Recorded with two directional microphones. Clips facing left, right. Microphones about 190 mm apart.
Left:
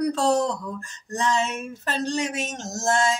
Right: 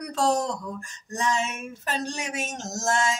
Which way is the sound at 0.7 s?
10° right (ahead or behind).